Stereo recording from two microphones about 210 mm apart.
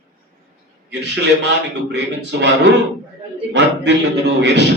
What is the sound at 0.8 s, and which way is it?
Speech, 55° right (ahead or behind).